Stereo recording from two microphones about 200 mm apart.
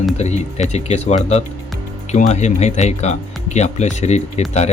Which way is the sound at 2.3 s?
35° left (ahead or behind).